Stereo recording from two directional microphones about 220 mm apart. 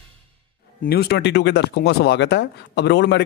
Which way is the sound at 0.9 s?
50° left (ahead or behind).